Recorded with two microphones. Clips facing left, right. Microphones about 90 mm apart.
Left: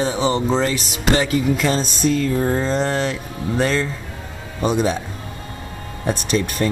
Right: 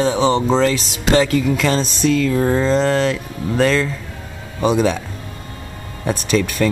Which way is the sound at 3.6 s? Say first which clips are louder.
Right 4 dB; 35° left (ahead or behind).